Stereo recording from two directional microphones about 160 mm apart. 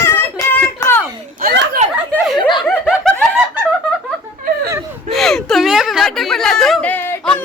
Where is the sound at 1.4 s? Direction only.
70° right (ahead or behind).